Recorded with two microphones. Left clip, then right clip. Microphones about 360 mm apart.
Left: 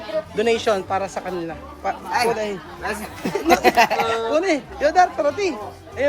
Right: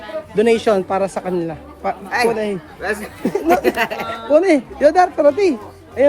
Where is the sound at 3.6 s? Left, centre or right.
Centre.